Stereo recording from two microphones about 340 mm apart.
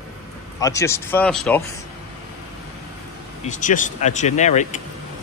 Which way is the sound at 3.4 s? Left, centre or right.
Left.